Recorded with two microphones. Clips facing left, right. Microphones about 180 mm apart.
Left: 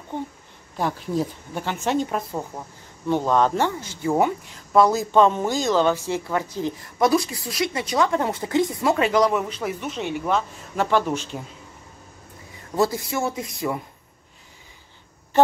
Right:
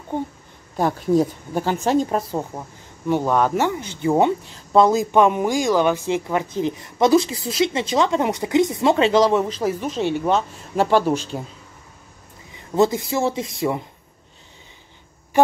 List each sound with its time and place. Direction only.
0.7 s speech: 45° right (ahead or behind)
3.1 s speech: 10° right (ahead or behind); by 11.2 s 35° right (ahead or behind)
12.7 s speech: 20° right (ahead or behind)
15.3 s a sound: 10° right (ahead or behind)